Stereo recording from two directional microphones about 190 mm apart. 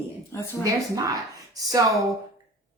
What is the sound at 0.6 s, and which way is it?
A woman's voice, 15° right (ahead or behind).